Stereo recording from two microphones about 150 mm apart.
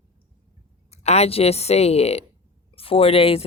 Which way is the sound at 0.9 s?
45° left (ahead or behind).